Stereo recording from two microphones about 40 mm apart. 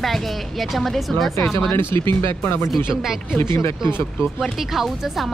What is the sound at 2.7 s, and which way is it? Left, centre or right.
Speech, centre.